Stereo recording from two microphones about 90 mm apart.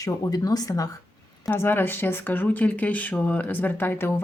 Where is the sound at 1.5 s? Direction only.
25° left (ahead or behind).